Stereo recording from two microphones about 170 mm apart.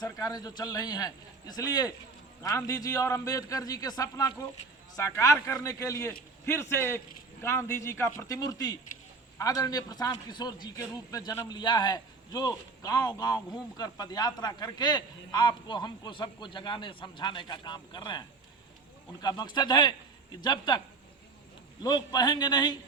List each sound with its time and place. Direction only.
0.0 s a man's voice: 20° left (ahead or behind)
21.8 s a man's voice: 25° left (ahead or behind)